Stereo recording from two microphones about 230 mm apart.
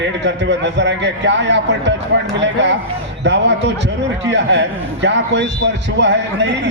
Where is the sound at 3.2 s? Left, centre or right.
Right.